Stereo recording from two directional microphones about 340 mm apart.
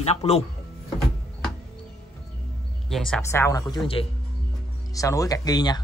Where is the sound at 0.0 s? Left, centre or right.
Centre.